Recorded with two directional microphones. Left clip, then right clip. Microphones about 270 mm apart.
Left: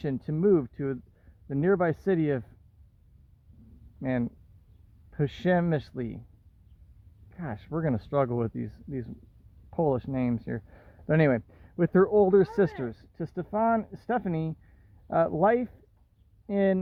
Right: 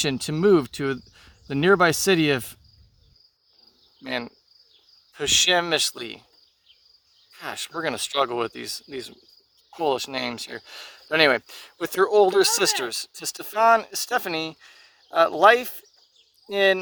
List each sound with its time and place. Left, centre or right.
0.0 s speech: centre
5.1 s speech: centre
7.3 s speech: centre